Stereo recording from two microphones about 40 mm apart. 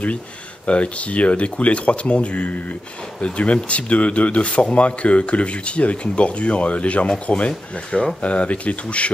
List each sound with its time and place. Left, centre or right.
0.7 s speech: left